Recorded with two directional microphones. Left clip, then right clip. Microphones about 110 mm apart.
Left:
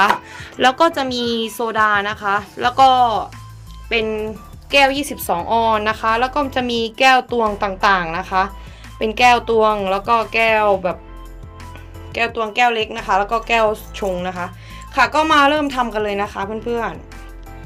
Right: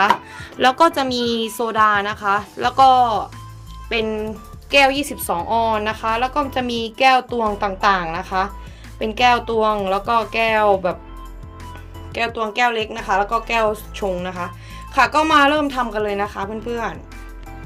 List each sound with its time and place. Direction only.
0.0 s music: 20° left (ahead or behind)
0.6 s a woman's voice: centre (ahead or behind); by 10.0 s 20° left (ahead or behind)
10.1 s a woman's voice: centre (ahead or behind)
12.1 s speech: 10° left (ahead or behind)
14.9 s a woman's voice: centre (ahead or behind)
15.9 s a woman's voice: 30° left (ahead or behind)